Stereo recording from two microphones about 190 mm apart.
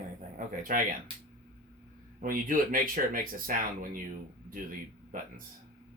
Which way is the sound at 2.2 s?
45° right (ahead or behind).